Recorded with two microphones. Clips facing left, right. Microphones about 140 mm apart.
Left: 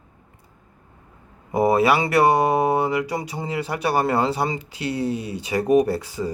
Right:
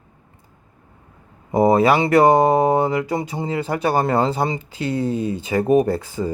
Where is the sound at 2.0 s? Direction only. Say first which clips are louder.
Right 4 dB; 25° right (ahead or behind).